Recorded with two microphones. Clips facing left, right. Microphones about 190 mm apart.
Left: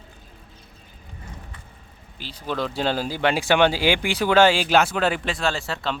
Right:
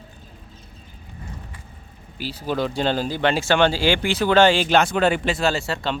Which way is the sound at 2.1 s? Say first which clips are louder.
Right 3 dB; 5° right (ahead or behind).